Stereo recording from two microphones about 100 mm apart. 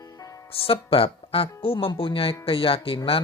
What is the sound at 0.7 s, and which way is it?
Speech, 70° left (ahead or behind).